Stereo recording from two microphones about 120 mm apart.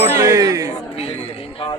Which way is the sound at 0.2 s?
30° right (ahead or behind).